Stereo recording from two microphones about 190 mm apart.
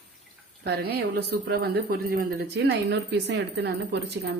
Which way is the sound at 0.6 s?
60° right (ahead or behind).